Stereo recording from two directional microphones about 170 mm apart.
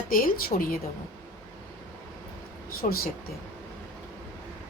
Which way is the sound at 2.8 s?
60° left (ahead or behind).